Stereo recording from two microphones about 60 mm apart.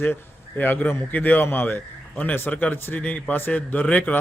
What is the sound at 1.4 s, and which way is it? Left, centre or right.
Speech, left.